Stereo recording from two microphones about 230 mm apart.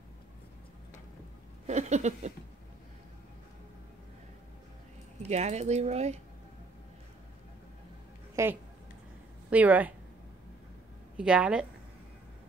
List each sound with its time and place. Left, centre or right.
1.7 s a sound: right
5.3 s speech: right
8.4 s a woman's voice: centre
11.1 s a woman's voice: centre